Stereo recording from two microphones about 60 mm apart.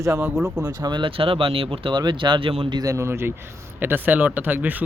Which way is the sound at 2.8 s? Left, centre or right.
Right.